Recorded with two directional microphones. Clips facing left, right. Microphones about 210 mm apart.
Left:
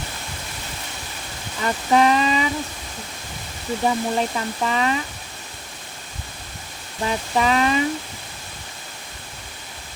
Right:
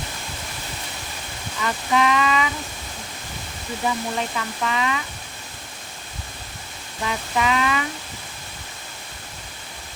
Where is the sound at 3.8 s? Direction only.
35° left (ahead or behind).